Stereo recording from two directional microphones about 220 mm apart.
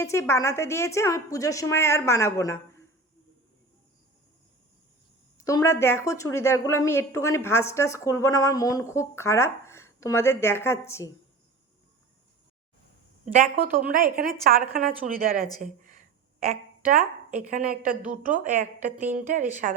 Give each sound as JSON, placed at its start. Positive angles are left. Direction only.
{"t": 0.0, "sound": "a woman's voice", "side_deg": 10}
{"t": 5.5, "sound": "a woman's voice", "side_deg": 15}
{"t": 13.2, "sound": "a woman's voice", "side_deg": -40}
{"t": 15.6, "sound": "a sound", "side_deg": -35}
{"t": 16.5, "sound": "a woman's voice", "side_deg": -40}